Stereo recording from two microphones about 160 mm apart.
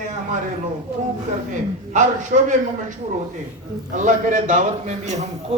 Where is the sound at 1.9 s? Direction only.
50° right (ahead or behind).